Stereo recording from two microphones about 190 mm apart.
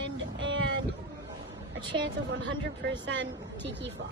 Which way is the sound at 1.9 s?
90° right.